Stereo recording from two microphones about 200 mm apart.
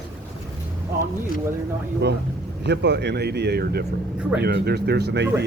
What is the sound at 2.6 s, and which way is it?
Speech, 60° right (ahead or behind).